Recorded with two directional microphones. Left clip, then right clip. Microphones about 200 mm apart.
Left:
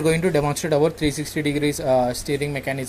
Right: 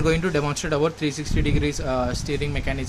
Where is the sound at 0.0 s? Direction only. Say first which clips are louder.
Left 3 dB; 10° left (ahead or behind).